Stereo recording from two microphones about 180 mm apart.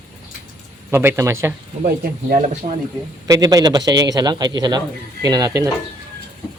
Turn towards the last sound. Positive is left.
turn(degrees=-20)  # may be behind; listen again after turning